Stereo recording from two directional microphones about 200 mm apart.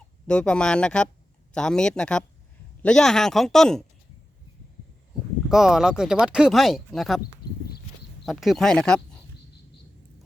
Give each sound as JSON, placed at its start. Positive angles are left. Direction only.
{"t": 0.3, "sound": "speech", "side_deg": 5}
{"t": 5.5, "sound": "speech", "side_deg": 0}
{"t": 7.4, "sound": "a sound", "side_deg": 50}
{"t": 8.2, "sound": "speech", "side_deg": 0}